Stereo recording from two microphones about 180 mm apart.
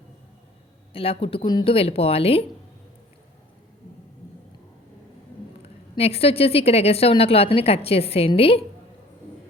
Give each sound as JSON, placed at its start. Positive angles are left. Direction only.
{"t": 0.9, "sound": "a woman's voice", "side_deg": 30}
{"t": 6.0, "sound": "a woman's voice", "side_deg": 35}